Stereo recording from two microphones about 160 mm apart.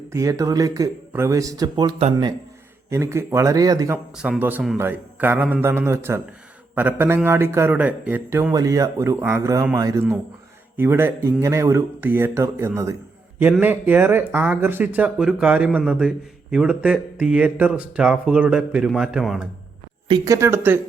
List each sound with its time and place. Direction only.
0.1 s speech: 20° right (ahead or behind)
2.9 s speech: 15° right (ahead or behind)
4.2 s speech: 10° right (ahead or behind)
20.1 s speech: 20° right (ahead or behind)